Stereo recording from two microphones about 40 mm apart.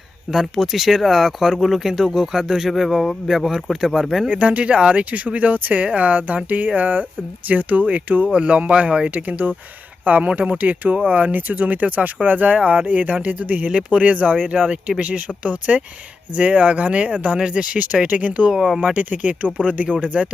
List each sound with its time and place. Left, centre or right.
0.3 s speech: centre
2.6 s speech: centre
3.2 s speech: centre
4.3 s speech: right
9.1 s speech: right
14.7 s speech: right
15.4 s speech: right
18.5 s speech: centre
18.9 s speech: right